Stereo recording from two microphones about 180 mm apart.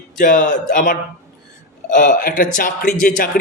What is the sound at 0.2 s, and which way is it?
Speech, 45° left (ahead or behind).